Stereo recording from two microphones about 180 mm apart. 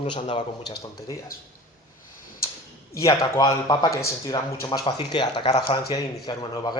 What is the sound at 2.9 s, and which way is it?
A man's voice, 15° left (ahead or behind).